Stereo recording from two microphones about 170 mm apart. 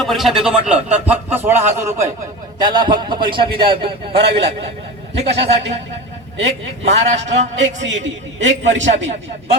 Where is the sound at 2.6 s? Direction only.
25° right (ahead or behind).